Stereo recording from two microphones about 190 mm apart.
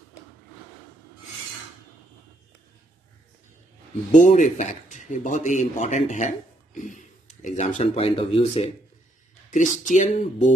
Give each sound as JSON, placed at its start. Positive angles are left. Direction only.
{"t": 4.1, "sound": "a man's voice", "side_deg": 40}